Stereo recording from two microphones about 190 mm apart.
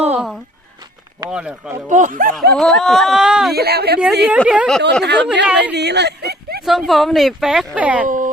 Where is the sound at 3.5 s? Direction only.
55° right (ahead or behind).